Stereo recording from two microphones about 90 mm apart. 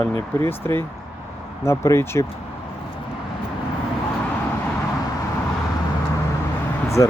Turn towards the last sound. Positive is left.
turn(degrees=35)  # may be behind; listen again after turning